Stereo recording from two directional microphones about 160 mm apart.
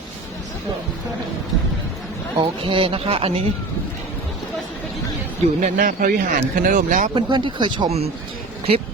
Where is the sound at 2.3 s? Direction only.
35° right (ahead or behind).